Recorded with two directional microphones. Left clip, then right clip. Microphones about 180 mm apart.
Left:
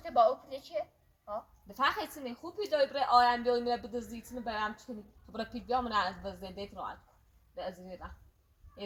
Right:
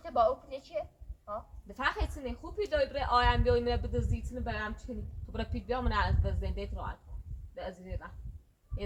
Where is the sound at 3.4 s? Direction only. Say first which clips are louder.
Right 1 dB; 15° right (ahead or behind).